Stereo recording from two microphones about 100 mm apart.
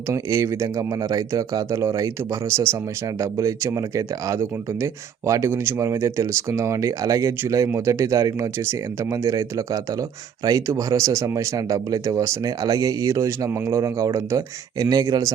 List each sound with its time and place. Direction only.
0.1 s speech: 30° right (ahead or behind)